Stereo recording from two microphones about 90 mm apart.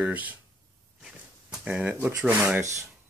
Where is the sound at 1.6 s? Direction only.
20° right (ahead or behind).